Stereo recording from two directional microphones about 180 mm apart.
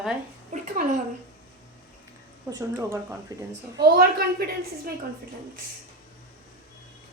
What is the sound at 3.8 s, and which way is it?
Speech, 60° right (ahead or behind).